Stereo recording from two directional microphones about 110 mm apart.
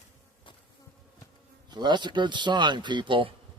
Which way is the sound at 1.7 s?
45° right (ahead or behind).